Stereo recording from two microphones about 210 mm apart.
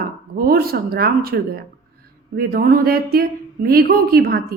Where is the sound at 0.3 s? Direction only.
45° right (ahead or behind).